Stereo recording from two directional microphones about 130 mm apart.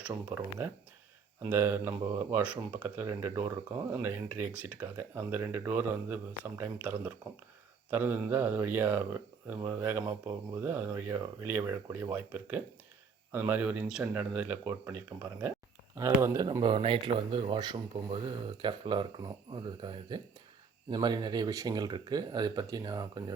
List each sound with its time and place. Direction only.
0.0 s speech: 10° right (ahead or behind); by 23.2 s 30° right (ahead or behind)